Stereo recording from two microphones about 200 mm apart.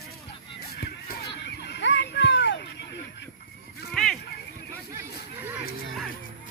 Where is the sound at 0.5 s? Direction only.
50° left (ahead or behind).